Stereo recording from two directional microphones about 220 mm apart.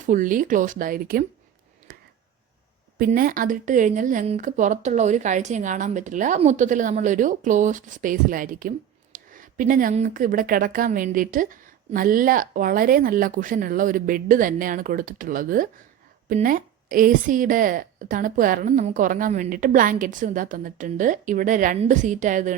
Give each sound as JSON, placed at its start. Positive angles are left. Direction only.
{"t": 0.0, "sound": "speech", "side_deg": -35}
{"t": 1.9, "sound": "a sound", "side_deg": -40}
{"t": 3.0, "sound": "speech", "side_deg": -40}